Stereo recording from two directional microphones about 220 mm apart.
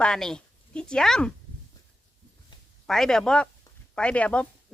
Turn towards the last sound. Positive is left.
turn(degrees=5)  # may be behind; listen again after turning